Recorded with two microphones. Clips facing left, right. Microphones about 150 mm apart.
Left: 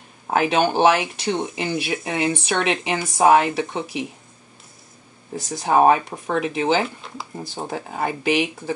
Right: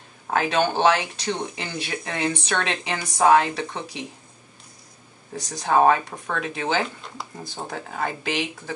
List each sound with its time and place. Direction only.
0.3 s speech: 15° left (ahead or behind)
5.3 s speech: 15° left (ahead or behind)